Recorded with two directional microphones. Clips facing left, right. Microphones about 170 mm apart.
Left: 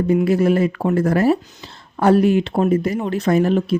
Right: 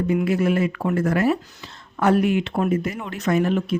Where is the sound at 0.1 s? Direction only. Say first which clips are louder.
Left 5 dB; 35° left (ahead or behind).